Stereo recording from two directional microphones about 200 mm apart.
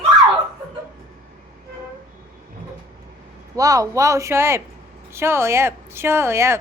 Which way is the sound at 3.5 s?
15° right (ahead or behind).